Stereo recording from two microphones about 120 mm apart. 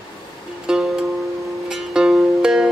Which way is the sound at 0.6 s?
5° right (ahead or behind).